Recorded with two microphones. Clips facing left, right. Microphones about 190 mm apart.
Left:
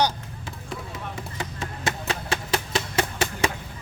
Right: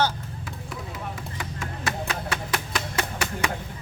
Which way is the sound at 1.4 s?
25° left (ahead or behind).